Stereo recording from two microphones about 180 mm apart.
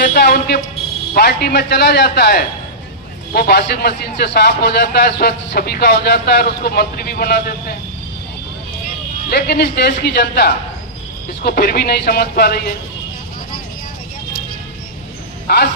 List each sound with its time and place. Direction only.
0.2 s a man's voice: 65° left (ahead or behind)
9.3 s a man's voice: 65° left (ahead or behind)
15.4 s speech: 65° left (ahead or behind)